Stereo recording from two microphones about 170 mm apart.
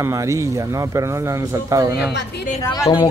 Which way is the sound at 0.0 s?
15° right (ahead or behind).